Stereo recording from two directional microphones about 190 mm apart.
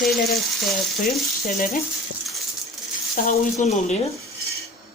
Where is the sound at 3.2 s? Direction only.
35° left (ahead or behind).